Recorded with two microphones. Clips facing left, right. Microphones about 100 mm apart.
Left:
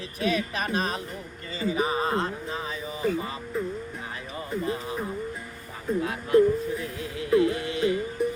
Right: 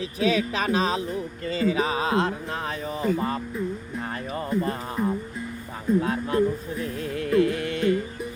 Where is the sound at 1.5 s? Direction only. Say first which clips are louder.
Right 3 dB; 90° right; by 5.0 s 50° right (ahead or behind).